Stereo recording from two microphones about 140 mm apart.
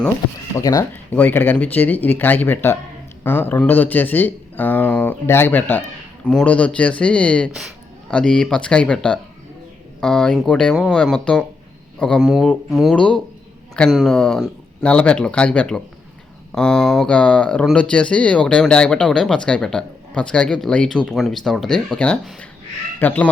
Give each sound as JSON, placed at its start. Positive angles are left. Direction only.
{"t": 0.5, "sound": "speech", "side_deg": 25}